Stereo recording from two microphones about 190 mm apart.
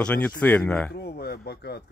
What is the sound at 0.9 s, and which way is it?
Speech, 55° left (ahead or behind).